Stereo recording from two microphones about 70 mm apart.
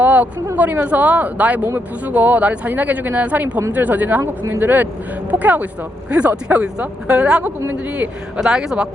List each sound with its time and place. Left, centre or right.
0.0 s a sound: right
0.5 s speech: right
4.2 s speech: right
4.6 s speech: right